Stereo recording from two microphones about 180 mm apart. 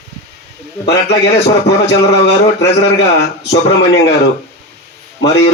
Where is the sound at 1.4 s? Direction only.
70° left (ahead or behind).